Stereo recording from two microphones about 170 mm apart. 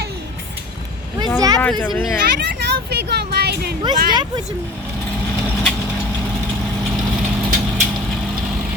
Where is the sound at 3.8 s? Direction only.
25° right (ahead or behind).